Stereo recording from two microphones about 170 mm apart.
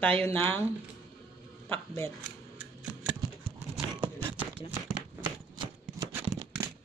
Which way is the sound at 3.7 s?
10° right (ahead or behind).